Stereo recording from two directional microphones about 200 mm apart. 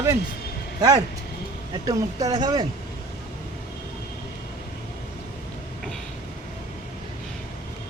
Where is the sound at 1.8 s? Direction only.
15° right (ahead or behind).